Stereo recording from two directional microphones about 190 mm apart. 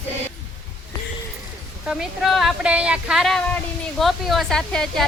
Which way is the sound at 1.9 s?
Centre (ahead or behind).